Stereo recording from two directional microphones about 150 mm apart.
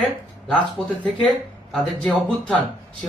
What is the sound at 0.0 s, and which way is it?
A man's voice, 10° left (ahead or behind).